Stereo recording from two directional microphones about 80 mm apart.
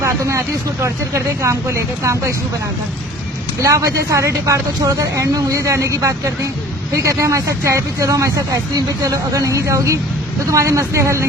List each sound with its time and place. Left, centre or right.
0.0 s speech: right
3.6 s speech: right